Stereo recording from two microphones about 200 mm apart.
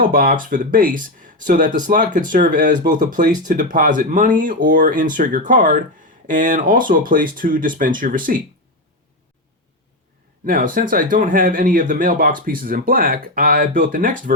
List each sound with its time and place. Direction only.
0.0 s speech: 45° right (ahead or behind)
10.4 s speech: 45° right (ahead or behind)